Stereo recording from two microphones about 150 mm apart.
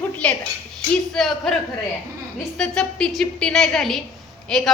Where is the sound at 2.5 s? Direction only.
5° left (ahead or behind).